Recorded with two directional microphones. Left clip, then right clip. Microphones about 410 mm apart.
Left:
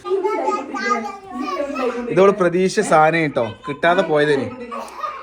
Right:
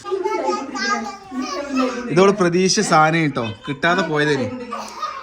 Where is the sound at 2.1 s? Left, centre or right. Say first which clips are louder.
Left 1 dB; centre.